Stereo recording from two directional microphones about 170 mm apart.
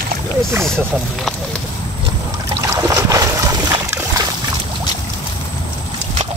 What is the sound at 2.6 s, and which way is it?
Boat, 15° right (ahead or behind).